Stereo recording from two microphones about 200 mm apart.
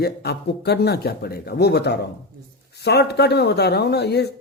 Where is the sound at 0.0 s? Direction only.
55° left (ahead or behind).